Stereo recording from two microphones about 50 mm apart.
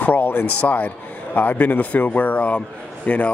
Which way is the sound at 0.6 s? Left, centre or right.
Left.